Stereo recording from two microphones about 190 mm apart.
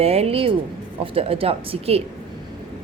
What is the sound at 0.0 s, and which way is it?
A woman's voice, 30° right (ahead or behind).